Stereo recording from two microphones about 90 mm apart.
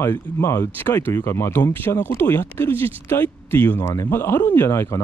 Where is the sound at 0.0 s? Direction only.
30° left (ahead or behind).